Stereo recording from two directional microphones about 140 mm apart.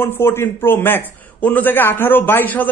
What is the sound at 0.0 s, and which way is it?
A man's voice, 15° left (ahead or behind).